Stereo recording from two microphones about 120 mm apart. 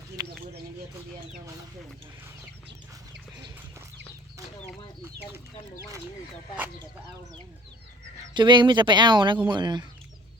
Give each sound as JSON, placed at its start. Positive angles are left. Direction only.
{"t": 0.2, "sound": "a sound", "side_deg": -35}
{"t": 5.0, "sound": "bird", "side_deg": -20}
{"t": 8.3, "sound": "speech", "side_deg": -40}